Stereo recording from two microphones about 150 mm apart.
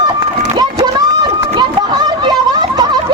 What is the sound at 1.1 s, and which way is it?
Run, 25° right (ahead or behind).